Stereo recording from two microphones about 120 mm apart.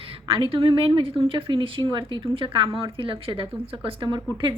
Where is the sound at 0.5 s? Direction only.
50° right (ahead or behind).